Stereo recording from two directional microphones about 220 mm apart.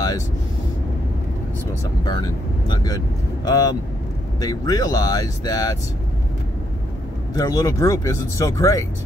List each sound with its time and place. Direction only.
2.0 s speech: 20° left (ahead or behind)
7.3 s speech: 15° left (ahead or behind)